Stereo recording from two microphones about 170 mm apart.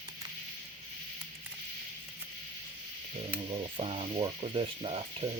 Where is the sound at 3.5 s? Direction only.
30° right (ahead or behind).